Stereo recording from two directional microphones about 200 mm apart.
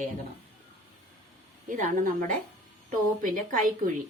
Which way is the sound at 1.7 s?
40° right (ahead or behind).